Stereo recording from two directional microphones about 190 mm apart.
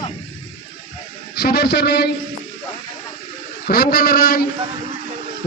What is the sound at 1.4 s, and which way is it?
Speech, 55° left (ahead or behind).